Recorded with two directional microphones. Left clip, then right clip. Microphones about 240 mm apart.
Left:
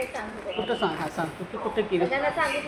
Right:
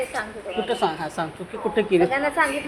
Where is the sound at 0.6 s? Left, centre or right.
Right.